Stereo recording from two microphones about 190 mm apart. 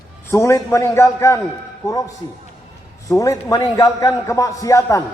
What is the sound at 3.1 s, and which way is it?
A man's voice, 15° left (ahead or behind).